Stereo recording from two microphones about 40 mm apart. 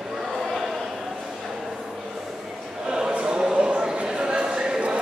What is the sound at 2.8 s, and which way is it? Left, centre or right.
Choir, centre.